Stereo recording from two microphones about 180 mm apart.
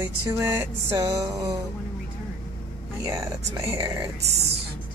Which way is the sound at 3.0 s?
20° right (ahead or behind).